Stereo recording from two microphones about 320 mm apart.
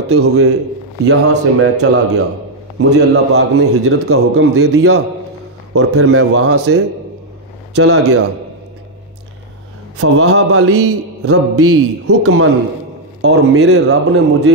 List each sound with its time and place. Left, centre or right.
0.1 s mantra: right
1.0 s a man's voice: right
5.7 s mantra: right
7.7 s speech: right
9.9 s mantra: right
13.2 s a man's voice: right